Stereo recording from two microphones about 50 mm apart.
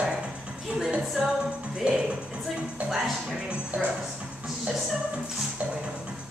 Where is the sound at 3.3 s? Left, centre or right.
Centre.